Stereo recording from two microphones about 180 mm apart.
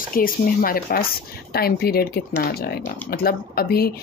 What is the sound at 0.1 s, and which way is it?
Speech, 50° left (ahead or behind).